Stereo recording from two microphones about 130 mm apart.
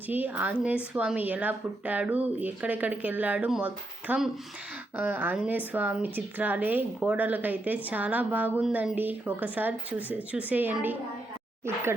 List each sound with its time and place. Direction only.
0.1 s a woman's voice: 15° right (ahead or behind)